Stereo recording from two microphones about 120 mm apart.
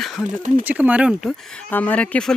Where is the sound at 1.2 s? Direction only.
5° left (ahead or behind).